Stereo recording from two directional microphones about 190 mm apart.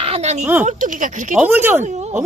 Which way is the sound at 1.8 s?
35° right (ahead or behind).